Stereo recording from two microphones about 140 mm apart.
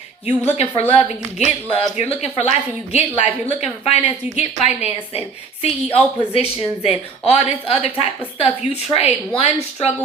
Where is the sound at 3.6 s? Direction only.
50° left (ahead or behind).